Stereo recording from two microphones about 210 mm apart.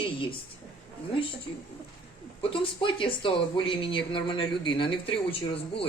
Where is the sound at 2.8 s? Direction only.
25° left (ahead or behind).